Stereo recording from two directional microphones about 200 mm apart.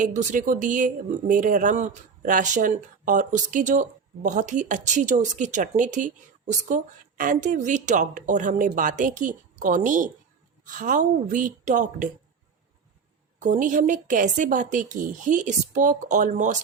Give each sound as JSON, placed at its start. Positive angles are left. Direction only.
{"t": 0.0, "sound": "speech", "side_deg": -40}
{"t": 13.4, "sound": "speech", "side_deg": -40}